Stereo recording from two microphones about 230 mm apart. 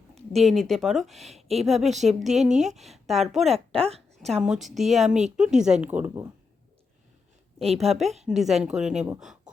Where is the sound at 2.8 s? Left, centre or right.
Centre.